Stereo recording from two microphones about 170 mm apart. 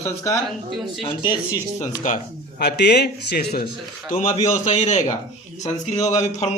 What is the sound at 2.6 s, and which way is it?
A man's voice, 70° left (ahead or behind).